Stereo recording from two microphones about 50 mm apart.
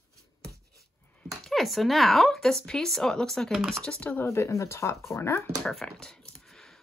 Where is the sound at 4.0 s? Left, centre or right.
Left.